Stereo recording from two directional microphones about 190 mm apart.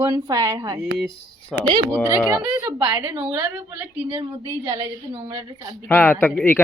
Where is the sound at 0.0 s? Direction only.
20° right (ahead or behind).